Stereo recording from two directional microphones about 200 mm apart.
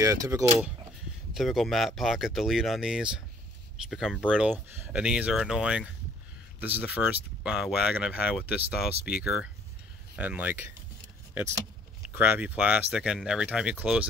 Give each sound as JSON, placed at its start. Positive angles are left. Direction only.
{"t": 0.0, "sound": "speech", "side_deg": -15}
{"t": 1.3, "sound": "speech", "side_deg": 0}
{"t": 12.2, "sound": "speech", "side_deg": -10}